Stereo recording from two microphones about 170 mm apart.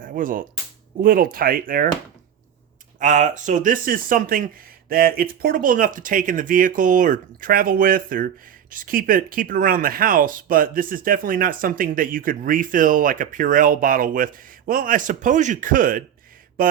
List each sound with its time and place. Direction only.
0.0 s speech: 55° right (ahead or behind)
3.0 s speech: 45° right (ahead or behind)
16.6 s mantra: 55° right (ahead or behind)